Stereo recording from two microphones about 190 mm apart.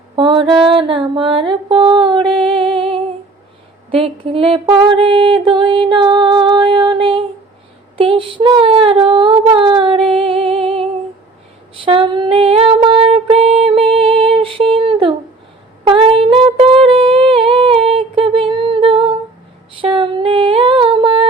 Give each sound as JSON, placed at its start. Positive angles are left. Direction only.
{"t": 0.2, "sound": "mantra", "side_deg": -25}
{"t": 2.7, "sound": "humming", "side_deg": -30}
{"t": 3.9, "sound": "music", "side_deg": -30}
{"t": 7.9, "sound": "a sound", "side_deg": -25}
{"t": 10.1, "sound": "music", "side_deg": -30}
{"t": 11.7, "sound": "female singing", "side_deg": -30}
{"t": 15.9, "sound": "humming", "side_deg": -30}
{"t": 19.8, "sound": "a sound", "side_deg": -25}